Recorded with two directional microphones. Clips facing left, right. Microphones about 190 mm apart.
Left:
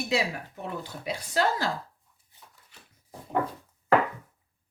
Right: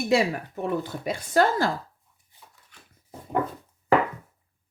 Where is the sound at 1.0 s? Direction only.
50° right (ahead or behind).